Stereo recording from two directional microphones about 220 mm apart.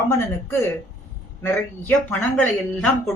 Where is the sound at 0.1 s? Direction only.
15° left (ahead or behind).